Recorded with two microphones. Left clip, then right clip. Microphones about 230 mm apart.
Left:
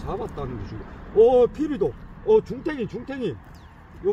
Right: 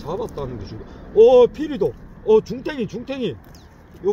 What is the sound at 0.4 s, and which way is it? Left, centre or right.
A man's voice, centre.